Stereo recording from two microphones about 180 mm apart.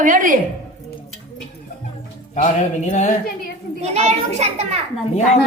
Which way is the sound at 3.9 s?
40° right (ahead or behind).